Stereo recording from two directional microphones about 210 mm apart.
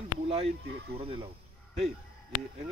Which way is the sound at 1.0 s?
25° right (ahead or behind).